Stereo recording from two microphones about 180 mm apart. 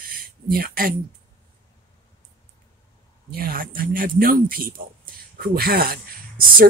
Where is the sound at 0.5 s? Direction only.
55° right (ahead or behind).